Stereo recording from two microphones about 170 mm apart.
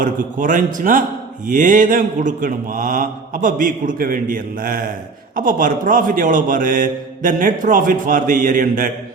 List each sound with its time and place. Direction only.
0.0 s a man's voice: 50° right (ahead or behind)